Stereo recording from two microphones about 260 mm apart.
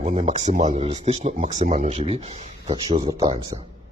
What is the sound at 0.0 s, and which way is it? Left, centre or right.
Speech, right.